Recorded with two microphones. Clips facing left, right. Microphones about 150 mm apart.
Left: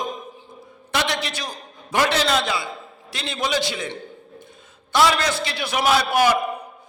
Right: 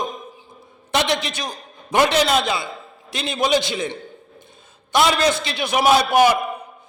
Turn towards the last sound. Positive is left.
turn(degrees=-20)  # may be behind; listen again after turning